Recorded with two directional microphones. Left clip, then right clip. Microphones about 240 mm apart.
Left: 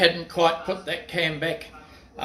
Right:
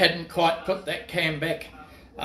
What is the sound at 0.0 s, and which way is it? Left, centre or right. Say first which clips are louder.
Speech: left 2 dB; centre.